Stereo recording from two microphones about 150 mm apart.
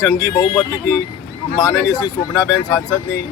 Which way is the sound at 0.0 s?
25° left (ahead or behind).